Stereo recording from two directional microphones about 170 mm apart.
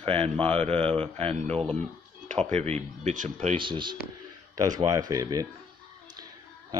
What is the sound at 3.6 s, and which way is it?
Speech, 30° right (ahead or behind).